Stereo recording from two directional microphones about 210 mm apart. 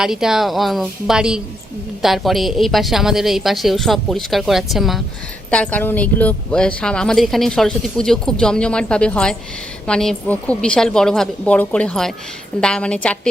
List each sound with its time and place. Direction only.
0.0 s speech: centre (ahead or behind)